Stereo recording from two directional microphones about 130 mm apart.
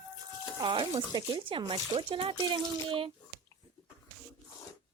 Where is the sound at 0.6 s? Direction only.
35° right (ahead or behind).